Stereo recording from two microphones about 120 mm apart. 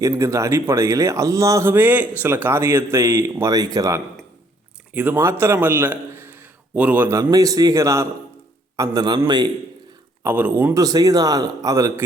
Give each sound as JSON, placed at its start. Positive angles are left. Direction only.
{"t": 0.0, "sound": "speech", "side_deg": -25}
{"t": 4.9, "sound": "a man's voice", "side_deg": -20}
{"t": 7.2, "sound": "speech", "side_deg": -30}
{"t": 10.2, "sound": "speech", "side_deg": -15}
{"t": 10.8, "sound": "speech", "side_deg": -30}